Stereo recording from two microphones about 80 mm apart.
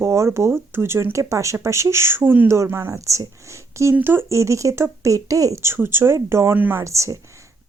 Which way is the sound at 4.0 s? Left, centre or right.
Right.